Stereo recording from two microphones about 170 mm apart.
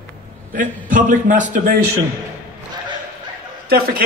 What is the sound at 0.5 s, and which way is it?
A man's voice, 50° right (ahead or behind).